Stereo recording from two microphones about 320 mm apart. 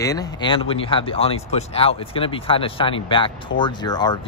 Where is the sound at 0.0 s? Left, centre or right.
Centre.